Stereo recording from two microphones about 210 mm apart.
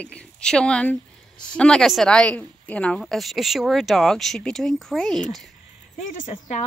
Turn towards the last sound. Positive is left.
turn(degrees=35)  # may be behind; listen again after turning